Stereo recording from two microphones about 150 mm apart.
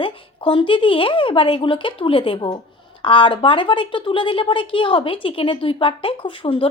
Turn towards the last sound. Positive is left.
turn(degrees=35)  # may be behind; listen again after turning